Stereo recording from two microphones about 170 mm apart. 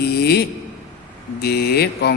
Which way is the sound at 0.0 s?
70° left (ahead or behind).